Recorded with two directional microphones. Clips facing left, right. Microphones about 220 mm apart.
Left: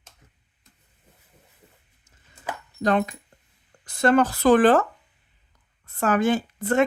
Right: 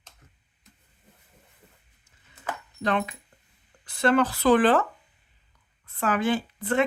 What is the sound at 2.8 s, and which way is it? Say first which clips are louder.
Speech: left 5 dB; 40° left (ahead or behind).